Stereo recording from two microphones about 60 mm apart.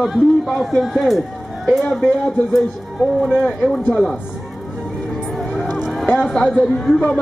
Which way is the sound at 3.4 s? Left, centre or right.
Centre.